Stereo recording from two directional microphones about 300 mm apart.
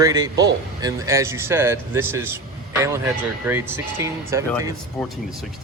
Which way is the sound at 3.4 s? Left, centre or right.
Centre.